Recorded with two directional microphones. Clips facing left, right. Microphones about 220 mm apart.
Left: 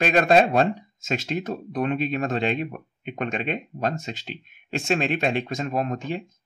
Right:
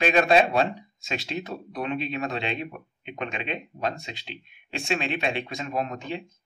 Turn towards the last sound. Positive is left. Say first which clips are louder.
# left 3 dB
turn(degrees=45)  # may be behind; listen again after turning